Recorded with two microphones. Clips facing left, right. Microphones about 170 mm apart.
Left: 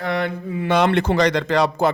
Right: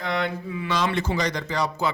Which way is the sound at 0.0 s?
50° left (ahead or behind).